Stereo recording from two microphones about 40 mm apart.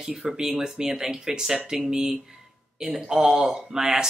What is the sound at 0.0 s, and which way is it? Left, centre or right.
Speech, centre.